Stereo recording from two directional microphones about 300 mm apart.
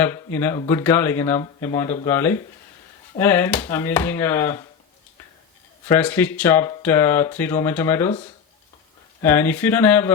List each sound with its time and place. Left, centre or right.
0.0 s speech: centre
5.9 s speech: centre
9.2 s speech: centre